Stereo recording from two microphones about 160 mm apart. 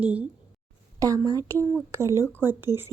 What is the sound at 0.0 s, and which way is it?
Speech, 10° right (ahead or behind).